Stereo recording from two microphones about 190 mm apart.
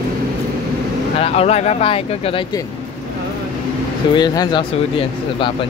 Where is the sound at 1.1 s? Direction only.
30° left (ahead or behind).